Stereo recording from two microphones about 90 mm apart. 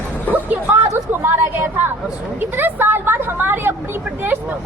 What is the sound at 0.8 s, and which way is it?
A woman's voice, 25° right (ahead or behind).